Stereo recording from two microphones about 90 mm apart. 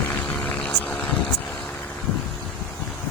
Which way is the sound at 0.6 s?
20° left (ahead or behind).